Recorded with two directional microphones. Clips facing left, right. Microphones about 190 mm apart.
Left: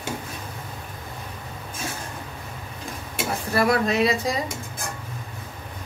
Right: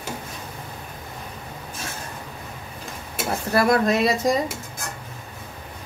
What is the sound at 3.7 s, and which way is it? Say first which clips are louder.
Speech: right 1 dB; 50° right (ahead or behind).